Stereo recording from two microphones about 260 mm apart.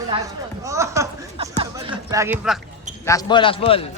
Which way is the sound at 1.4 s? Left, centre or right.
Centre.